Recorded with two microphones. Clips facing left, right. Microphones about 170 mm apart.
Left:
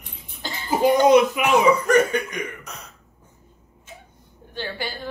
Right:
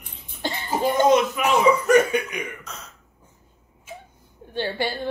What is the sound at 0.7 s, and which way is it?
Speech, 15° left (ahead or behind).